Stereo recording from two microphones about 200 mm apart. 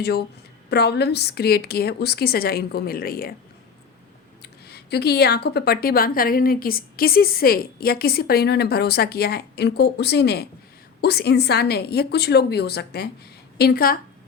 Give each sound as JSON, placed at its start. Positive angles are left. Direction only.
{"t": 0.0, "sound": "a woman's voice", "side_deg": 55}
{"t": 4.4, "sound": "a woman's voice", "side_deg": 55}